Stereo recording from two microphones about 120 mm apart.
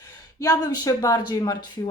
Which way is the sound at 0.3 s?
30° left (ahead or behind).